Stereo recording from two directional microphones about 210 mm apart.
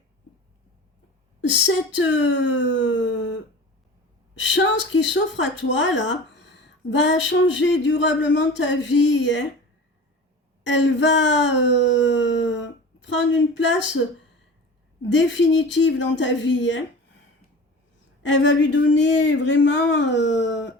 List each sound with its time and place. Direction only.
2.1 s speech: 60° left (ahead or behind)
4.4 s speech: 60° left (ahead or behind)
10.7 s speech: 60° left (ahead or behind)
15.1 s speech: 60° left (ahead or behind)
18.2 s speech: 60° left (ahead or behind)